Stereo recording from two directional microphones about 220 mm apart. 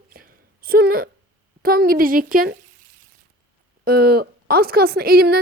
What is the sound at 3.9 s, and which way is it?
A woman's voice, 45° right (ahead or behind).